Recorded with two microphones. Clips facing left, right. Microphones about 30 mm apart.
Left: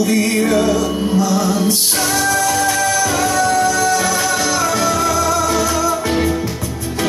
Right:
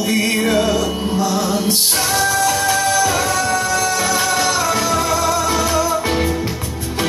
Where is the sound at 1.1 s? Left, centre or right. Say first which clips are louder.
Left 2 dB; right.